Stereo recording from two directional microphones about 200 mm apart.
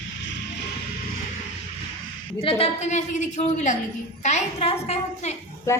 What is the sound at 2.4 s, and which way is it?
A woman's voice, 30° left (ahead or behind).